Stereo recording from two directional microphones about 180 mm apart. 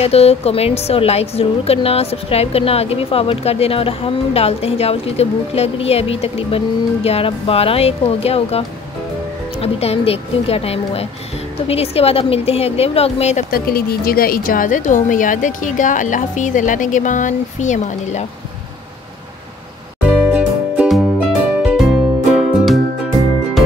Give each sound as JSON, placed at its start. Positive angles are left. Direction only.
{"t": 0.0, "sound": "a woman's voice", "side_deg": 35}
{"t": 13.5, "sound": "a woman's voice", "side_deg": 55}
{"t": 20.3, "sound": "music", "side_deg": -5}